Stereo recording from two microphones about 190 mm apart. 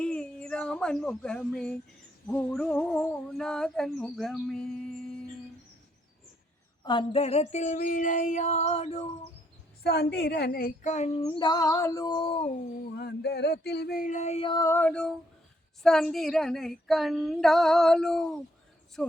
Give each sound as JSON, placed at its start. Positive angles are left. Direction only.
{"t": 0.0, "sound": "a sound", "side_deg": 5}
{"t": 2.2, "sound": "female singing", "side_deg": 5}
{"t": 6.8, "sound": "speech", "side_deg": 30}
{"t": 9.8, "sound": "speech", "side_deg": 60}
{"t": 13.0, "sound": "speech", "side_deg": 60}
{"t": 15.8, "sound": "female singing", "side_deg": 5}